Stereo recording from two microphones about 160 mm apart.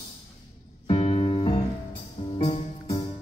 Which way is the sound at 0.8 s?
40° left (ahead or behind).